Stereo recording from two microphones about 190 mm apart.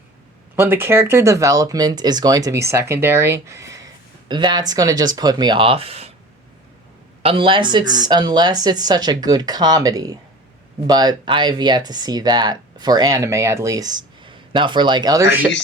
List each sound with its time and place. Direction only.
0.5 s speech: 10° right (ahead or behind); by 6.1 s 30° right (ahead or behind)
7.2 s speech: 30° right (ahead or behind); by 15.4 s 15° right (ahead or behind)